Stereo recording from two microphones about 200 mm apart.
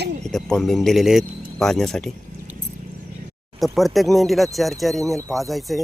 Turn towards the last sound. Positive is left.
turn(degrees=0)  # may be behind; listen again after turning